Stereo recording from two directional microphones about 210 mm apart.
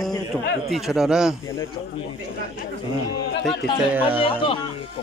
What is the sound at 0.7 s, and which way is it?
Speech, centre (ahead or behind).